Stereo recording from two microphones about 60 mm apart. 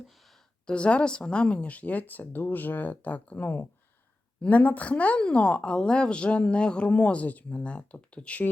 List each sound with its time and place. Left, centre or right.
0.7 s a woman's voice: centre